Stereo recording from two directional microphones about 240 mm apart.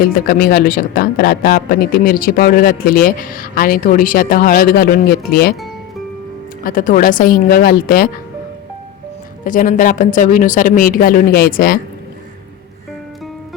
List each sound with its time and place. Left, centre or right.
0.0 s speech: left
6.7 s speech: left
9.4 s speech: left